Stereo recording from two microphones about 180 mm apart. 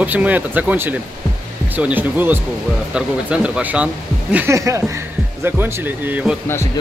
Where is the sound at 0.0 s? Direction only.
10° right (ahead or behind).